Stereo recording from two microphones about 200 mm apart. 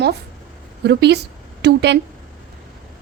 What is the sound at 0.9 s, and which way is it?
A woman's voice, 55° right (ahead or behind).